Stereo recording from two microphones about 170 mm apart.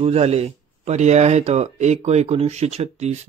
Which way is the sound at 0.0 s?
35° right (ahead or behind).